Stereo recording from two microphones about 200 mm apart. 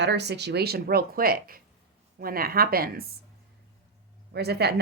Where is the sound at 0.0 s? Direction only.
60° right (ahead or behind).